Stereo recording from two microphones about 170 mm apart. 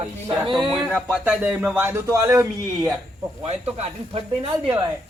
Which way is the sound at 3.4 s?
35° right (ahead or behind).